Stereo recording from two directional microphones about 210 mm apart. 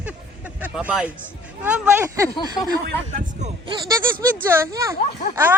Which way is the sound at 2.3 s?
20° left (ahead or behind).